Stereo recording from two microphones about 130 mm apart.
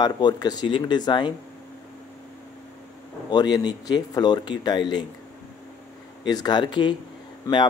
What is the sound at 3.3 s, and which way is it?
Speech, 35° left (ahead or behind).